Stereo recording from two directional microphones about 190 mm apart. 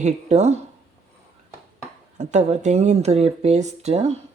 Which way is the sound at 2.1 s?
35° right (ahead or behind).